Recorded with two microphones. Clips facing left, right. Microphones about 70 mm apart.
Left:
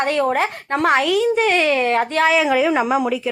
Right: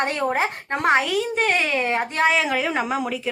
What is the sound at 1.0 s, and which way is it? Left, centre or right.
Speech, centre.